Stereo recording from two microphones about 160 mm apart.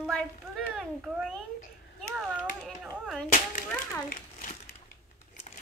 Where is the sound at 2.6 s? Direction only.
Centre (ahead or behind).